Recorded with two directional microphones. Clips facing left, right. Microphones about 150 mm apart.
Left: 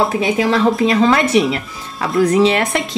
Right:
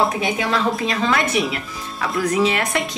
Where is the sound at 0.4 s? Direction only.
30° left (ahead or behind).